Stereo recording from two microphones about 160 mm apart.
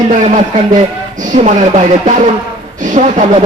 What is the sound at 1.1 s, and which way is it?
Speech, 50° right (ahead or behind).